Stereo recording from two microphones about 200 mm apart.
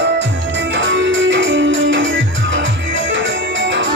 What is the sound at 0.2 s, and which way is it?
Music, 60° right (ahead or behind).